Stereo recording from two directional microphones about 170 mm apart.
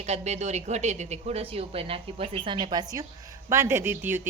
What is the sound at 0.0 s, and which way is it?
A woman's voice, 40° right (ahead or behind).